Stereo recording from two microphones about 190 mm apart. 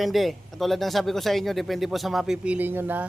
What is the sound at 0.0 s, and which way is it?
Speech, centre (ahead or behind).